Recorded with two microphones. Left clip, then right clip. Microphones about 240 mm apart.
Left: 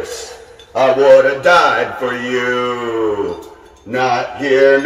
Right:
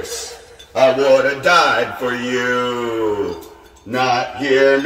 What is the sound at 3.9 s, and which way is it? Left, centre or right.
Speech, centre.